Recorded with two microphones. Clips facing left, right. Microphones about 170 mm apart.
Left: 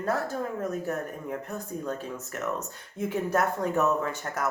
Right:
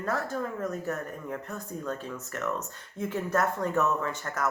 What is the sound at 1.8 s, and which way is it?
Speech, 10° left (ahead or behind).